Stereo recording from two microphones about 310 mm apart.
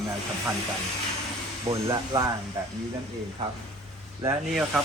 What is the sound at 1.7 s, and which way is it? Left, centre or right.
Speech, centre.